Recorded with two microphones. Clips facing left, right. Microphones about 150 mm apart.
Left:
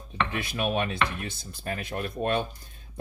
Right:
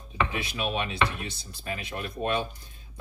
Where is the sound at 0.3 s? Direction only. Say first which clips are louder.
Left 2 dB; 50° left (ahead or behind).